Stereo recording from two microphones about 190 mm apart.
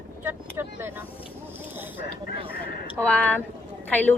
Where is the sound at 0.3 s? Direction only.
10° right (ahead or behind).